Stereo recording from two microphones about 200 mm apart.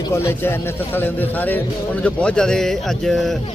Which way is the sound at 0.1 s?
10° left (ahead or behind).